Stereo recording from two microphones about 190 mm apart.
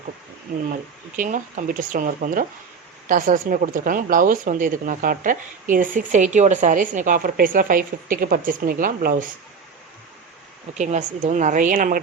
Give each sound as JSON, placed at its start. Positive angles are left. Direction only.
{"t": 1.1, "sound": "speech", "side_deg": -45}
{"t": 10.8, "sound": "speech", "side_deg": -40}